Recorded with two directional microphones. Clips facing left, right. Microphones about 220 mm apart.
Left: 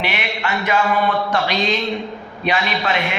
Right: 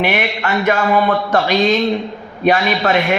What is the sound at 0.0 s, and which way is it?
A man's voice, 50° right (ahead or behind).